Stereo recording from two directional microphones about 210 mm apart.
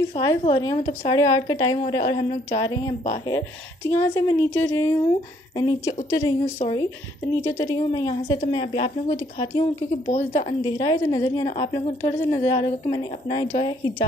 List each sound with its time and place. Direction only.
0.1 s a woman's voice: 20° left (ahead or behind)
9.1 s speech: 15° left (ahead or behind)
10.0 s a woman's voice: 30° left (ahead or behind)
10.6 s a woman's voice: 20° left (ahead or behind)